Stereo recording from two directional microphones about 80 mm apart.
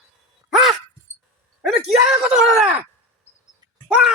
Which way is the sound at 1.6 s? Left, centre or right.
Centre.